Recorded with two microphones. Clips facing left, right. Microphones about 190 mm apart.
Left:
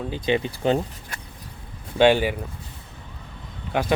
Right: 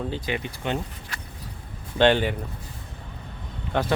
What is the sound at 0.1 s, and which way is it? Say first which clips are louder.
Speech: left 6 dB; 25° left (ahead or behind).